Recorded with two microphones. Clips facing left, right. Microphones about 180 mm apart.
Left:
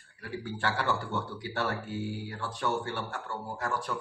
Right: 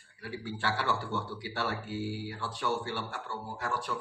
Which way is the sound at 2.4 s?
50° left (ahead or behind).